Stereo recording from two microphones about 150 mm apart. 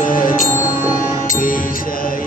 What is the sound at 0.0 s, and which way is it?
Music, 65° left (ahead or behind).